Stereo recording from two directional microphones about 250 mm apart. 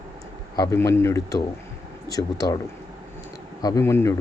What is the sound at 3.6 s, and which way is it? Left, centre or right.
Speech, centre.